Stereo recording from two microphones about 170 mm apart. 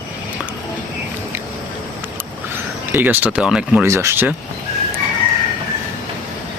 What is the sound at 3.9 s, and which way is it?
Speech, 15° right (ahead or behind).